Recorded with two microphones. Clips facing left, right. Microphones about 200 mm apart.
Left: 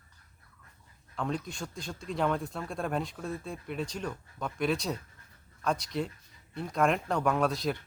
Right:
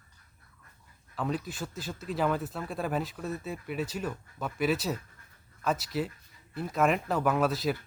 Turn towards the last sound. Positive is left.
turn(degrees=-5)  # may be behind; listen again after turning